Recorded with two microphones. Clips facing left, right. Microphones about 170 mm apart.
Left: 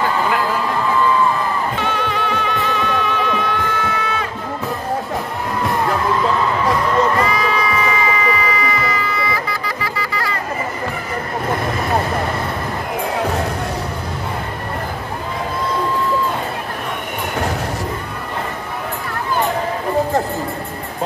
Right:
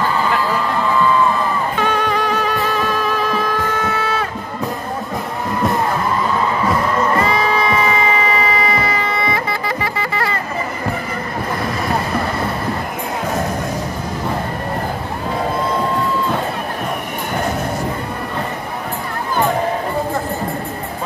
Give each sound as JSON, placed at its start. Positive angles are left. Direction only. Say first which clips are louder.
{"t": 1.8, "sound": "music", "louder": "right 3 dB", "side_deg": -45}
{"t": 7.2, "sound": "music", "louder": "right 2 dB", "side_deg": -30}